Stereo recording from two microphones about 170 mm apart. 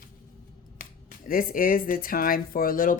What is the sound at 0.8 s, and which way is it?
Speech, 55° left (ahead or behind).